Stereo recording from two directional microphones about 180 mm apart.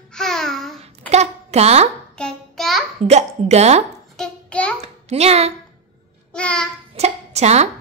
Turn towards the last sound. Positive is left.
turn(degrees=-35)  # may be behind; listen again after turning